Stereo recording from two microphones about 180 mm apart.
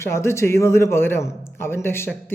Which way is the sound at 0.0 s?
15° left (ahead or behind).